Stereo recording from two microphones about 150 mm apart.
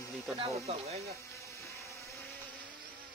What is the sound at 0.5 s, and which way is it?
Speech, 45° right (ahead or behind).